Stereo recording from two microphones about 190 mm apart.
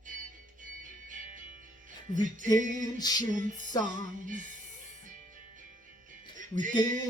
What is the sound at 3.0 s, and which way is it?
Speech, 20° left (ahead or behind).